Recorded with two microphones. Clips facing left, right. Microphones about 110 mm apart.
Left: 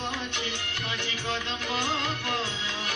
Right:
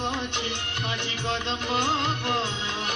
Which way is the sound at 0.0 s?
20° right (ahead or behind).